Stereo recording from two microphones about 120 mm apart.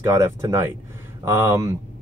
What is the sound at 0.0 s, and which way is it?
Speech, 25° right (ahead or behind).